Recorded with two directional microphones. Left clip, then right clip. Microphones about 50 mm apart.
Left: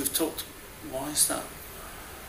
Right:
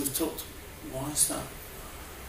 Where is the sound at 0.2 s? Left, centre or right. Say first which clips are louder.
Left 2 dB; left.